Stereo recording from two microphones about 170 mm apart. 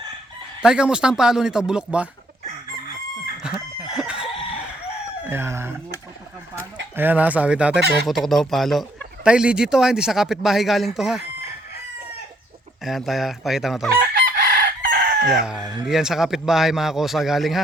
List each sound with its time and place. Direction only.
0.6 s speech: 5° right (ahead or behind)
3.4 s chicken: 5° right (ahead or behind)
5.2 s speech: 15° right (ahead or behind)
6.9 s speech: 10° right (ahead or behind)
12.8 s speech: centre (ahead or behind)
13.9 s chicken: 65° right (ahead or behind)
15.3 s speech: 5° right (ahead or behind)